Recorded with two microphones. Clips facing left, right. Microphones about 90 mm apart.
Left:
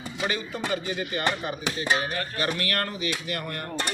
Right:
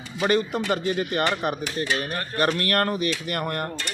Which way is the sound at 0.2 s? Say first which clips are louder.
Right 8 dB; 60° right (ahead or behind).